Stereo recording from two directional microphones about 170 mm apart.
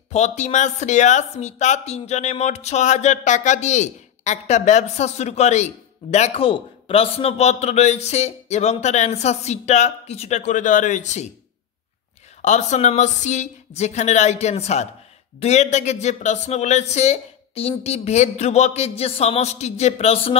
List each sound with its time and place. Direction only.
0.1 s speech: 45° left (ahead or behind)
12.4 s speech: 45° left (ahead or behind)